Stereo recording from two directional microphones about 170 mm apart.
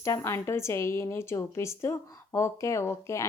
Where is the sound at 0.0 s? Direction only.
15° left (ahead or behind).